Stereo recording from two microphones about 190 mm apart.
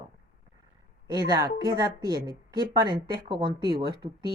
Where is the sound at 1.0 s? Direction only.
20° right (ahead or behind).